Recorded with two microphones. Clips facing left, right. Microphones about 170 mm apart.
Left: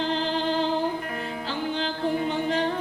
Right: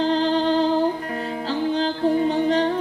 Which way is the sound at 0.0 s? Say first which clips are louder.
Right 6 dB; 35° right (ahead or behind).